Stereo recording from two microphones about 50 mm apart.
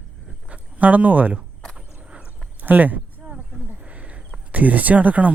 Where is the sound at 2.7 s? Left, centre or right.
Right.